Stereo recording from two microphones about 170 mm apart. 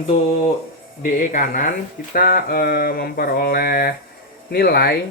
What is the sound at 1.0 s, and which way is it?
Speech, 50° left (ahead or behind).